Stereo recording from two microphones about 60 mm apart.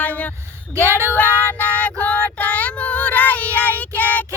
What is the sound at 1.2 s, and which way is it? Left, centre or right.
Female singing, left.